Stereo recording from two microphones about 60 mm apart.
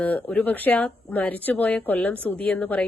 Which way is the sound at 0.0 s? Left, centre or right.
Left.